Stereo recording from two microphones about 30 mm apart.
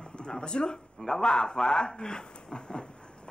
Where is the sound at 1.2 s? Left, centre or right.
Left.